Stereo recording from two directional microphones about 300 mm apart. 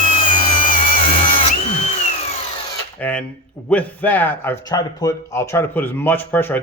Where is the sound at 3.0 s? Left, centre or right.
Centre.